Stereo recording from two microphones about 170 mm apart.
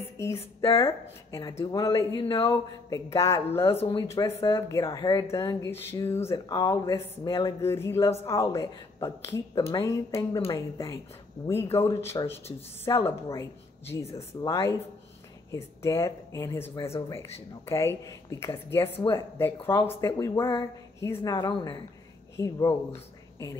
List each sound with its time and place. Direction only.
0.4 s speech: 35° left (ahead or behind)
1.5 s speech: 20° left (ahead or behind)
3.7 s speech: 30° left (ahead or behind)
4.4 s speech: 15° left (ahead or behind)